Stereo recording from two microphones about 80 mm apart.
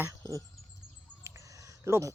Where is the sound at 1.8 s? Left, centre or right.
Right.